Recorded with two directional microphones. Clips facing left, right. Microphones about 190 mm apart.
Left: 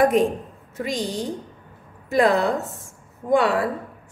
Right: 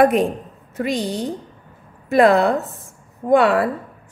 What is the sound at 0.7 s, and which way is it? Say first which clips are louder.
A woman's voice: right 4 dB; 60° right (ahead or behind).